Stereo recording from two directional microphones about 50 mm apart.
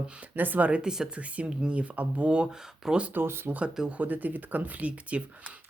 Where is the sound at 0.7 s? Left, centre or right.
Centre.